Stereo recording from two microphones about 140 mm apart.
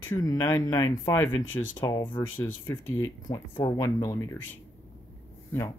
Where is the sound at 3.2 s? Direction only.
25° left (ahead or behind).